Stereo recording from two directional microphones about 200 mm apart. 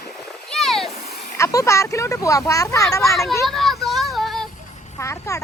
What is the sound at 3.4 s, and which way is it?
Child singing, centre (ahead or behind).